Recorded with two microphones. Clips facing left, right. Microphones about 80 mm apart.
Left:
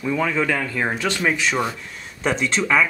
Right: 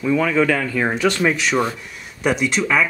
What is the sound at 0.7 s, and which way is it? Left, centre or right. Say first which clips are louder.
Speech: right 3 dB; centre.